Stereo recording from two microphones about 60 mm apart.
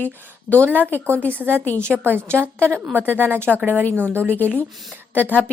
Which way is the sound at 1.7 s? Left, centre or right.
Right.